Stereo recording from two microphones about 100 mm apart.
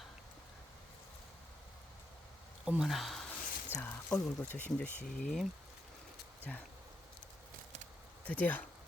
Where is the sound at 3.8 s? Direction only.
15° left (ahead or behind).